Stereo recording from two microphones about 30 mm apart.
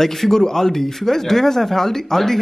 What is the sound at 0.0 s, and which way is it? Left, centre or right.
Speech, centre.